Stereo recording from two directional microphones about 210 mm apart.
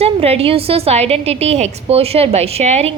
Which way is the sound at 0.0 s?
30° right (ahead or behind).